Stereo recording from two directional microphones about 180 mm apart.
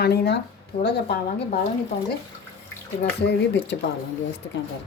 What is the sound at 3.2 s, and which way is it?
Speech, 75° left (ahead or behind).